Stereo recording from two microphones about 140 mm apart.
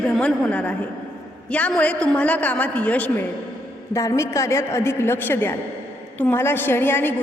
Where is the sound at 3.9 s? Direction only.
20° left (ahead or behind).